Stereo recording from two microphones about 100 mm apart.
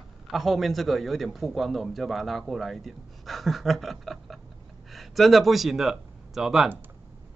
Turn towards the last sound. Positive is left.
turn(degrees=-5)  # may be behind; listen again after turning